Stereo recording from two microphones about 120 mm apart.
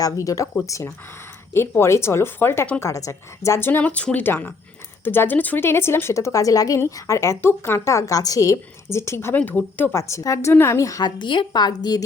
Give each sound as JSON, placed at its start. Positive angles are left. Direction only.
{"t": 0.0, "sound": "speech", "side_deg": 25}
{"t": 2.8, "sound": "a woman's voice", "side_deg": 25}